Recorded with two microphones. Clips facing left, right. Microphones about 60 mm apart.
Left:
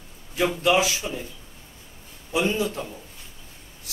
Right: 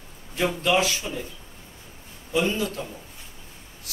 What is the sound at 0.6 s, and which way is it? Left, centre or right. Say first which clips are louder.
Speech: left 2 dB; centre.